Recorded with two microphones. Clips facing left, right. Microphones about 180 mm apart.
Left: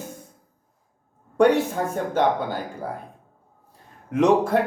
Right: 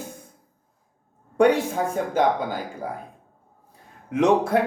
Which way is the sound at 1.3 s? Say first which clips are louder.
Left 1 dB; 10° right (ahead or behind).